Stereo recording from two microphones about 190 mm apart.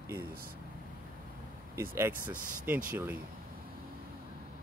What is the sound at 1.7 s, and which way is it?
Speech, 10° right (ahead or behind).